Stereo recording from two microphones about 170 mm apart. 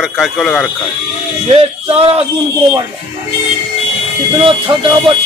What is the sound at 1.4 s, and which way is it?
Speech, 35° right (ahead or behind).